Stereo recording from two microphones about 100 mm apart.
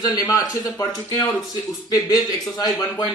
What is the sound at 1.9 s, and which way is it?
Speech, 35° left (ahead or behind).